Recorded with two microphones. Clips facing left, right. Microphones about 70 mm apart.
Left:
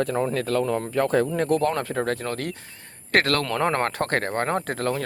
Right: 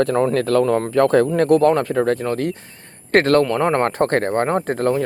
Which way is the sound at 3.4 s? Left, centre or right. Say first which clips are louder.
Right 6 dB; centre.